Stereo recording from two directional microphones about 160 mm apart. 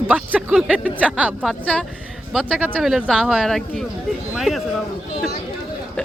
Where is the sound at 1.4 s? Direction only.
5° left (ahead or behind).